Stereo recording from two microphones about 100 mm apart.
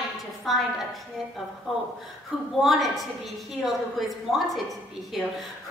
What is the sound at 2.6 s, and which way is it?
A woman's voice, centre (ahead or behind).